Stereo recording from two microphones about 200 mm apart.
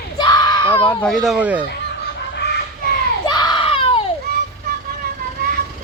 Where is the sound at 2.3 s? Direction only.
55° left (ahead or behind).